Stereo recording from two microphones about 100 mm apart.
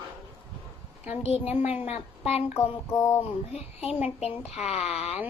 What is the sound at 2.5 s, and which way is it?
Child singing, 30° left (ahead or behind).